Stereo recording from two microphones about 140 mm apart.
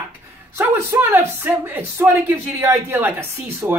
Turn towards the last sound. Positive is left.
turn(degrees=-15)  # may be behind; listen again after turning